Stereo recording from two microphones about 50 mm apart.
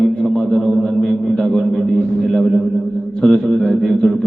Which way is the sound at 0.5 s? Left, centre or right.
Centre.